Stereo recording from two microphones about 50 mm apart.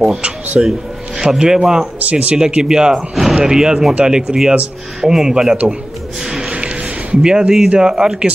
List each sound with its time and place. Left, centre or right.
0.6 s a sound: centre
1.3 s speech: centre
2.0 s speech: right
2.3 s speech: centre
6.2 s snort: centre
6.5 s a sound: right
7.8 s speech: centre